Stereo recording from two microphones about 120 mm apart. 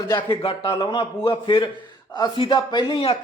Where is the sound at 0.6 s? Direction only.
35° left (ahead or behind).